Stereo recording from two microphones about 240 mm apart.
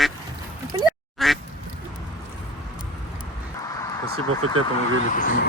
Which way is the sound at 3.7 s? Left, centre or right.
Centre.